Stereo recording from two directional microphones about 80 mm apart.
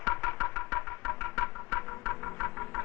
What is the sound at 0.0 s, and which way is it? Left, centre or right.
Music, left.